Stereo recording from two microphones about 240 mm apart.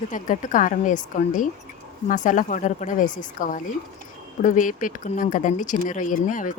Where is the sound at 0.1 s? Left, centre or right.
Left.